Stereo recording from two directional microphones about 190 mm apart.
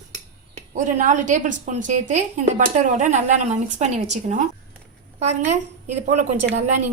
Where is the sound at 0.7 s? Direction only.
40° right (ahead or behind).